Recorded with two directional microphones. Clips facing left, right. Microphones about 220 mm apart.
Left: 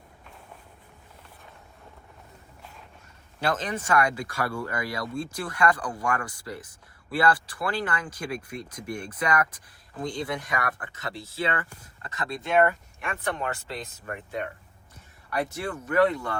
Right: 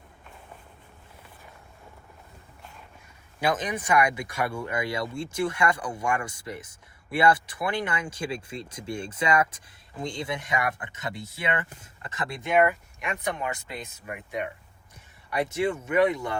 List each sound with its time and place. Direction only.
3.4 s speech: 15° right (ahead or behind)